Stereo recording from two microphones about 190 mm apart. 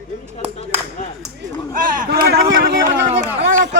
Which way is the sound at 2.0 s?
55° right (ahead or behind).